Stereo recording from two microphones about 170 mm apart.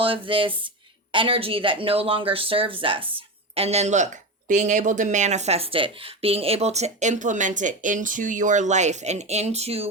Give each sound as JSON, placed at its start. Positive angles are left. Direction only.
{"t": 0.0, "sound": "speech", "side_deg": -30}